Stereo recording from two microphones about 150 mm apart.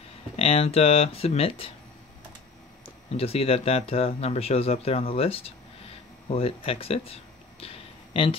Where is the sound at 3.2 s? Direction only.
40° left (ahead or behind).